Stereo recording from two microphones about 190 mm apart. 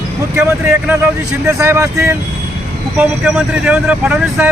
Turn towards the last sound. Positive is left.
turn(degrees=-10)  # may be behind; listen again after turning